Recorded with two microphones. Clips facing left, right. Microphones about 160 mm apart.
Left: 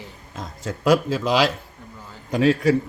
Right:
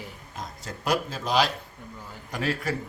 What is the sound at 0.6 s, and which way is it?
Speech, 90° left.